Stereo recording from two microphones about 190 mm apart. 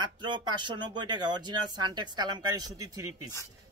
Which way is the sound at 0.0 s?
25° right (ahead or behind).